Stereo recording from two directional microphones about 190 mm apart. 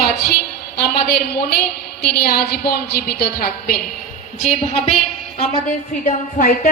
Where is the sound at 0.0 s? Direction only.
55° left (ahead or behind).